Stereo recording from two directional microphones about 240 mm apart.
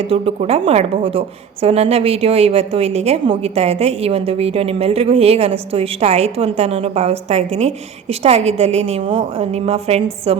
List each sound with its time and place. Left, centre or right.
0.1 s a woman's voice: right